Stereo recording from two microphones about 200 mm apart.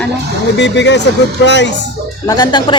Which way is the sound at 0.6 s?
60° left (ahead or behind).